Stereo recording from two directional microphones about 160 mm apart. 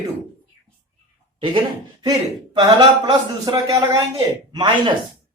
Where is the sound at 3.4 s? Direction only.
25° right (ahead or behind).